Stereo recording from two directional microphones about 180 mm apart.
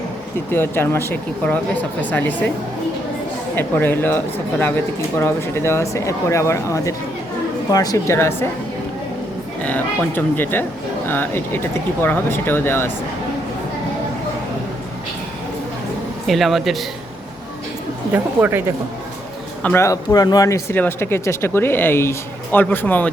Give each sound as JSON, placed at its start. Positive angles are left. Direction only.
{"t": 0.5, "sound": "speech", "side_deg": 10}
{"t": 3.5, "sound": "speech", "side_deg": 10}
{"t": 9.6, "sound": "speech", "side_deg": 10}
{"t": 16.2, "sound": "speech", "side_deg": 0}
{"t": 18.1, "sound": "speech", "side_deg": -10}
{"t": 19.6, "sound": "speech", "side_deg": 15}